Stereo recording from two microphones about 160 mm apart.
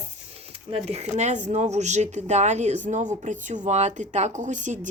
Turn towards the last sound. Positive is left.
turn(degrees=-50)  # may be behind; listen again after turning